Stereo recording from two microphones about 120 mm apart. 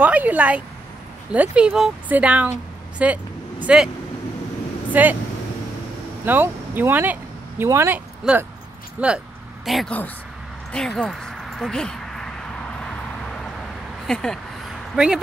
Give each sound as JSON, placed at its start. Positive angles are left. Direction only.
{"t": 0.0, "sound": "speech", "side_deg": -10}
{"t": 3.0, "sound": "vehicle", "side_deg": -10}
{"t": 4.9, "sound": "speech", "side_deg": -15}
{"t": 6.2, "sound": "speech", "side_deg": -15}
{"t": 8.2, "sound": "speech", "side_deg": -5}
{"t": 9.7, "sound": "speech", "side_deg": 0}
{"t": 10.7, "sound": "a sound", "side_deg": 5}
{"t": 14.0, "sound": "speech", "side_deg": 5}
{"t": 15.0, "sound": "speech", "side_deg": -5}